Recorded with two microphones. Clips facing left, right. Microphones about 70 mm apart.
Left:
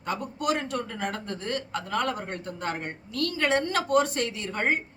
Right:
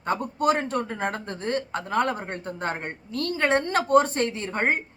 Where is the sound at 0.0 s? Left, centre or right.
Right.